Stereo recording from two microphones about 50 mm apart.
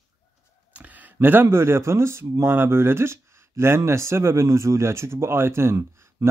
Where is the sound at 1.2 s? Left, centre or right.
Right.